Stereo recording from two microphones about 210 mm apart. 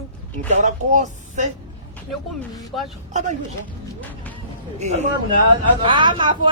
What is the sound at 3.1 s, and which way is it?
Speech, 35° right (ahead or behind).